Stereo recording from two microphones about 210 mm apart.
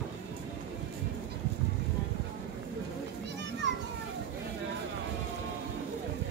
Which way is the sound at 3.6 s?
60° right (ahead or behind).